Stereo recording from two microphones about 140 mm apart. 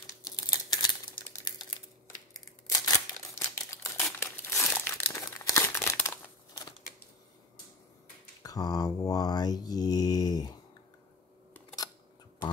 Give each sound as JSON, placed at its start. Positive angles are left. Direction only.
{"t": 0.0, "sound": "typewriter", "side_deg": 25}
{"t": 2.3, "sound": "a sound", "side_deg": 25}
{"t": 3.3, "sound": "typewriter", "side_deg": 20}
{"t": 4.2, "sound": "crumpling", "side_deg": 20}
{"t": 8.4, "sound": "mantra", "side_deg": 25}